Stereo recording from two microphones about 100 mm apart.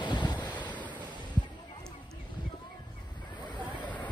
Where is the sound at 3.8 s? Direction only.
15° left (ahead or behind).